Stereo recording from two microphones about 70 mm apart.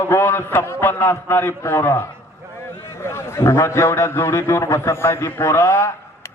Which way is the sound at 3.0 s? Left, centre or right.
Left.